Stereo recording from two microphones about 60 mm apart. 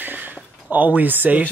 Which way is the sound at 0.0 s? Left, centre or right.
Right.